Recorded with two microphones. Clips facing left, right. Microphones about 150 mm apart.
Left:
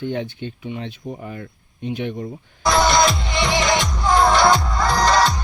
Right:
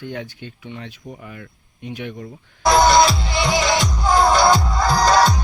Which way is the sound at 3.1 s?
35° right (ahead or behind).